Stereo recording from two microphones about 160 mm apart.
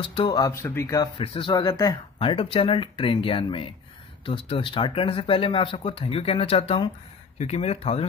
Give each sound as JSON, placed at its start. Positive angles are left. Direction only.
{"t": 0.0, "sound": "speech", "side_deg": 30}
{"t": 1.2, "sound": "speech", "side_deg": 35}
{"t": 1.5, "sound": "speech", "side_deg": 25}
{"t": 2.1, "sound": "speech", "side_deg": 35}